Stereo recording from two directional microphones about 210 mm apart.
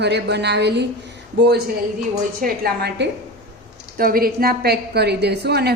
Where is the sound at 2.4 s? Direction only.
45° right (ahead or behind).